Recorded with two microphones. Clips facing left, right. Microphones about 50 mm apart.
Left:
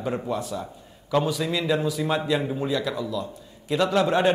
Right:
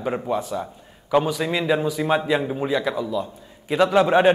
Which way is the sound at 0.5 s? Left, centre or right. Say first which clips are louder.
Right 4 dB; centre.